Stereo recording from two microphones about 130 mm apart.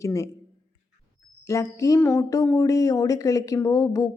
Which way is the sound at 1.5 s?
25° left (ahead or behind).